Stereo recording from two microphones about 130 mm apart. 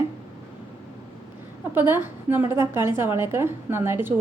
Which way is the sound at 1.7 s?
15° right (ahead or behind).